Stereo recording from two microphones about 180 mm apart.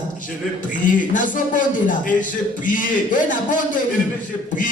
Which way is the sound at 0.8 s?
45° left (ahead or behind).